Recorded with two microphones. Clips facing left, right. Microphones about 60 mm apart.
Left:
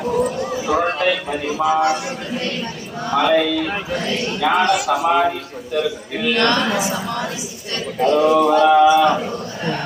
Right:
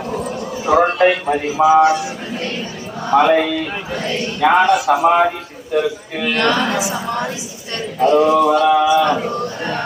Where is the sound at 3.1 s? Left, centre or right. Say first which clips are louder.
Right 3 dB; right.